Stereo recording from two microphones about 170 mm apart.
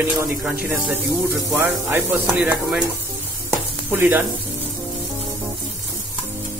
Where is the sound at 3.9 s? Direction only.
10° right (ahead or behind).